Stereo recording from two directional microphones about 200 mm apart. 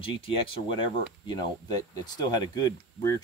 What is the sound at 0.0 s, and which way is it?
Speech, 25° left (ahead or behind).